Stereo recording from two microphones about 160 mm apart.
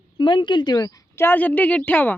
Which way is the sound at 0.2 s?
30° left (ahead or behind).